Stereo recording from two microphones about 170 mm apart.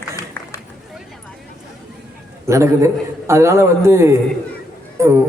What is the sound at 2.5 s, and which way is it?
A man's voice, 15° right (ahead or behind).